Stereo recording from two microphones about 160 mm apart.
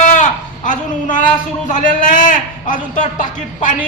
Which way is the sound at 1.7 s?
55° left (ahead or behind).